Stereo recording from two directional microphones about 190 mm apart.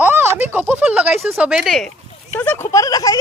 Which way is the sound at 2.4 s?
10° left (ahead or behind).